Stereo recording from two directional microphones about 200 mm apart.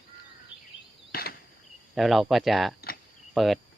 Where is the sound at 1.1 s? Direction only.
50° left (ahead or behind).